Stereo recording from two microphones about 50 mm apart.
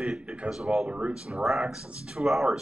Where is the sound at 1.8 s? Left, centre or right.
Right.